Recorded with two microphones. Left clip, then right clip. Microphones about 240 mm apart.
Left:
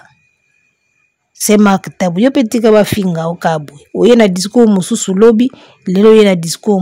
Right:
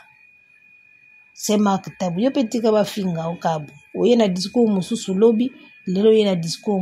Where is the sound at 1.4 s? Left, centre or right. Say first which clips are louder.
Left 10 dB; left.